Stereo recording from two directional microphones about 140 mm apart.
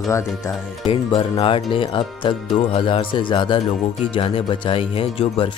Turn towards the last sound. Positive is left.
turn(degrees=40)  # may be behind; listen again after turning